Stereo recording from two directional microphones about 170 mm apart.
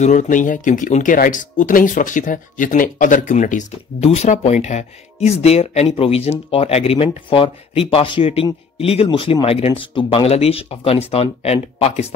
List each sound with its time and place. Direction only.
0.0 s speech: 45° left (ahead or behind)